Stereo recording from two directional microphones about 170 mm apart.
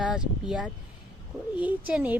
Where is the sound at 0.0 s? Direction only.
5° right (ahead or behind).